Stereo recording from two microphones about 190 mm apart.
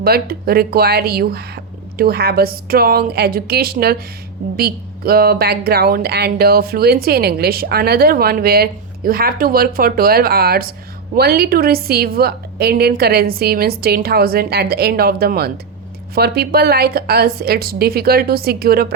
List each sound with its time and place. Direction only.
0.0 s a woman's voice: 55° right (ahead or behind)